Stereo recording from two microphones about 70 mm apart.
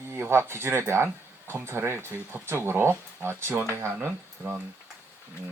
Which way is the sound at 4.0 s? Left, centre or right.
Right.